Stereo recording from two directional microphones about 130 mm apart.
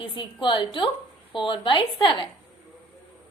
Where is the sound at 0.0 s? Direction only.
40° left (ahead or behind).